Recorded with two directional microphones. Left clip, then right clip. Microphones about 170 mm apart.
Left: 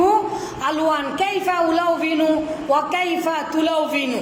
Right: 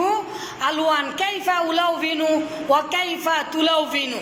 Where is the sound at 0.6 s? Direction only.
15° left (ahead or behind).